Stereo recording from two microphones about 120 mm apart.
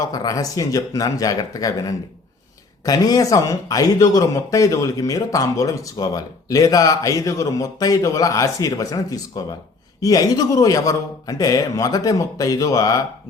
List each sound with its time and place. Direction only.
0.0 s speech: 30° left (ahead or behind)